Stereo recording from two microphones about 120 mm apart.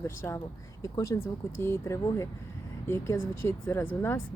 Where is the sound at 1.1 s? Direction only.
35° left (ahead or behind).